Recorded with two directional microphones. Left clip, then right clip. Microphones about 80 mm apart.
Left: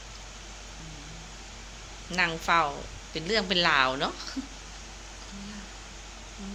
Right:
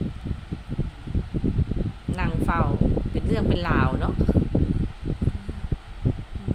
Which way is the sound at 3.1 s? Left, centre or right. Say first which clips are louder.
Left 5 dB; right.